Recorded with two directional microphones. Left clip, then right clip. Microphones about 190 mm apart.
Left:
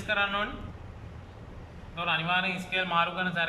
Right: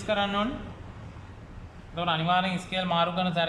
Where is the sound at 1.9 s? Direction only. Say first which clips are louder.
Right 2 dB; 30° right (ahead or behind).